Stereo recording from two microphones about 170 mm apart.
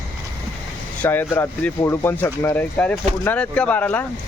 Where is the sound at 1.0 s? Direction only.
10° left (ahead or behind).